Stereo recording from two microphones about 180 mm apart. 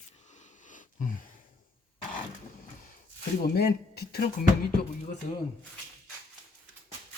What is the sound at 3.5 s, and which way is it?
Speech, 60° left (ahead or behind).